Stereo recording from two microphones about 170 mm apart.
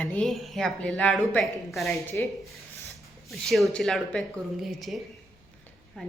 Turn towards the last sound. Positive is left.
turn(degrees=0)  # may be behind; listen again after turning